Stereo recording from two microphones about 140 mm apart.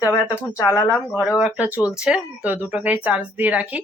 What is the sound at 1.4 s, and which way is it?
A woman's voice, 10° right (ahead or behind).